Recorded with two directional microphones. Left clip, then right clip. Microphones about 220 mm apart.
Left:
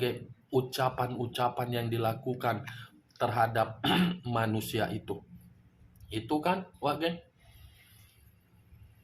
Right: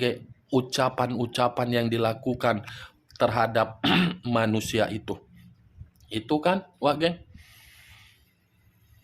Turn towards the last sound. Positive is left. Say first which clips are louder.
# right 7 dB
turn(degrees=-50)  # may be behind; listen again after turning